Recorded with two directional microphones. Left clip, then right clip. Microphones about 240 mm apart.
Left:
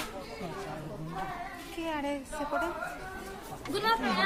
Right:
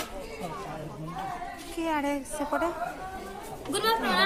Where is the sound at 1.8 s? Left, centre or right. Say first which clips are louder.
Right 5 dB; right.